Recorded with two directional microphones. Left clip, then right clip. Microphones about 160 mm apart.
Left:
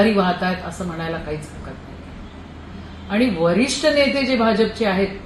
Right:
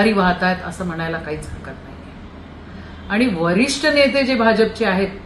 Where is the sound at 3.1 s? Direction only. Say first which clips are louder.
Even; 10° right (ahead or behind).